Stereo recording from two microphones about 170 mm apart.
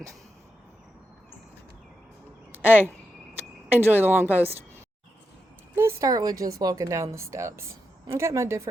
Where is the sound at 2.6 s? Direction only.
10° right (ahead or behind).